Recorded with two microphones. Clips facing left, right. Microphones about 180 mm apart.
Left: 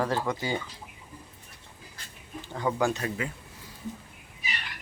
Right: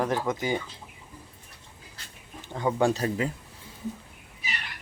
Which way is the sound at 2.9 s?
35° right (ahead or behind).